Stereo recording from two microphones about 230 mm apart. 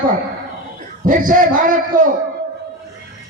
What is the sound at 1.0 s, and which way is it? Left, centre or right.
Speech, right.